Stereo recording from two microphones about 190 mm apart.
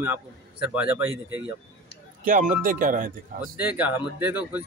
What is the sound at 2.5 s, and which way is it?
Speech, 45° right (ahead or behind).